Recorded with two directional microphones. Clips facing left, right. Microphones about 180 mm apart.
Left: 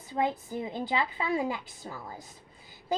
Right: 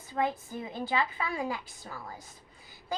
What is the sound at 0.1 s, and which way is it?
A woman's voice, 20° left (ahead or behind).